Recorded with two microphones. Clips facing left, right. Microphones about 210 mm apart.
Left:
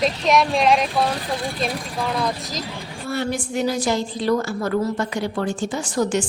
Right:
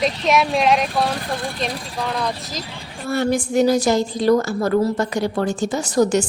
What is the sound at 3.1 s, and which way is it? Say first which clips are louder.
A woman's voice: right 6 dB; 45° right (ahead or behind).